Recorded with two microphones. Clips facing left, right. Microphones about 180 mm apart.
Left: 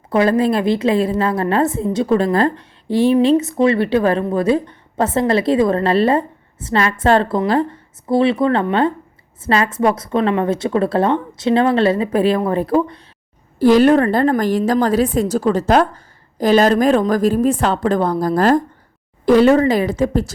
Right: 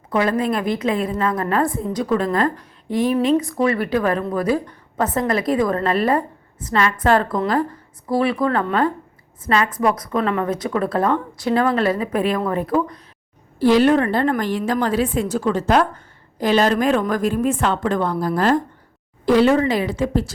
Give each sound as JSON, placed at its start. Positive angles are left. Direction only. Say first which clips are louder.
{"t": 0.1, "sound": "a woman's voice", "louder": "left 5 dB", "side_deg": 30}
{"t": 13.6, "sound": "a woman's voice", "louder": "left 3 dB", "side_deg": 45}